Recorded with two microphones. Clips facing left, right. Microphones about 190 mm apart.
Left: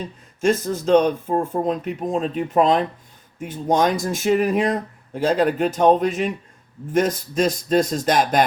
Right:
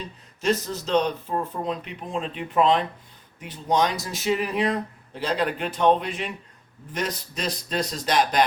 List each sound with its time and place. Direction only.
0.0 s speech: 50° left (ahead or behind)